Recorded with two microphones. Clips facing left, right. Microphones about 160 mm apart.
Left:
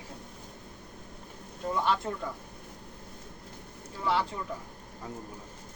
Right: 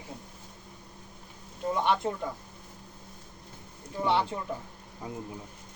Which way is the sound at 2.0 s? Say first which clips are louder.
Right 3 dB; 20° right (ahead or behind).